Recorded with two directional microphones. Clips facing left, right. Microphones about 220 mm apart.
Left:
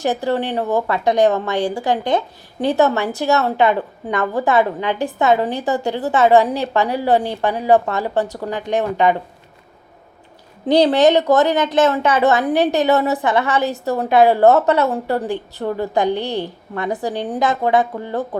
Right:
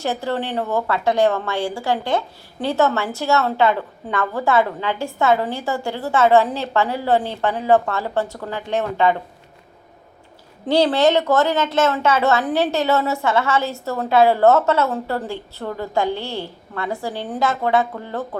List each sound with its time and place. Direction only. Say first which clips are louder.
0.0 s speech: left 4 dB; 15° left (ahead or behind)
10.7 s speech: left 3 dB; 15° left (ahead or behind)